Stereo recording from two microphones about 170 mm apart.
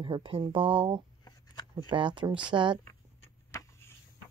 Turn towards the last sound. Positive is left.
turn(degrees=15)  # may be behind; listen again after turning